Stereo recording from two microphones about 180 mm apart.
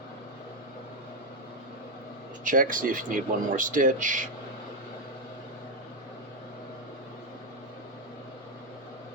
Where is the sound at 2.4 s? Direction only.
45° right (ahead or behind).